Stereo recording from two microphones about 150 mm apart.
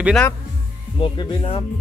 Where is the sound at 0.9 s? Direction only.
30° left (ahead or behind).